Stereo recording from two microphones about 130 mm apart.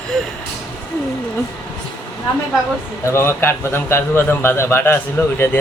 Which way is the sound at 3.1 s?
20° left (ahead or behind).